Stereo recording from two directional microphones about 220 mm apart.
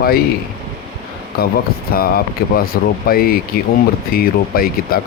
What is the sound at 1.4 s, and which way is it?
Speech, 45° left (ahead or behind).